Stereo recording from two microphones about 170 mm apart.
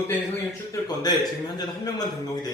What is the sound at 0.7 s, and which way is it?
A man's voice, 25° left (ahead or behind).